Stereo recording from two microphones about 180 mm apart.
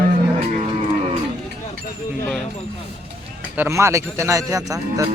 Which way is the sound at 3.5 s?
15° right (ahead or behind).